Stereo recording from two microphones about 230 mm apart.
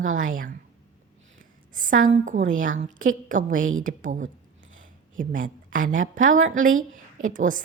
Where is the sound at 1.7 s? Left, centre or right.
Right.